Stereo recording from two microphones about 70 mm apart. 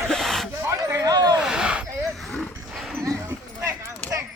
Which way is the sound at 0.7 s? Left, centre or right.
Right.